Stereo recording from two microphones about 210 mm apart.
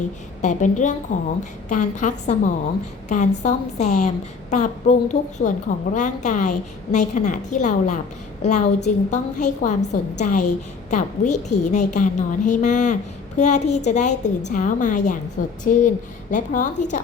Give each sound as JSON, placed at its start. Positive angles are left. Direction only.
{"t": 0.4, "sound": "a woman's voice", "side_deg": 35}